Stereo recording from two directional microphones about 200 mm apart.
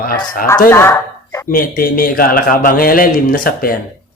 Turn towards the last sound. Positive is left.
turn(degrees=45)  # may be behind; listen again after turning